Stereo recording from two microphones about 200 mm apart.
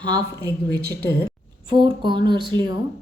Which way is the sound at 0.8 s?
50° right (ahead or behind).